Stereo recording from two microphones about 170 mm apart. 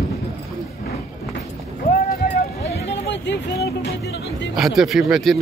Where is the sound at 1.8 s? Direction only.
55° left (ahead or behind).